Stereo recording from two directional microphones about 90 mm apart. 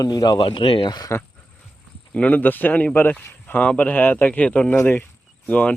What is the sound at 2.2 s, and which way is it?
Speech, 15° left (ahead or behind).